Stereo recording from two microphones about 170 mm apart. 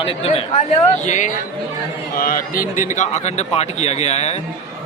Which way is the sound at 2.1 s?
55° left (ahead or behind).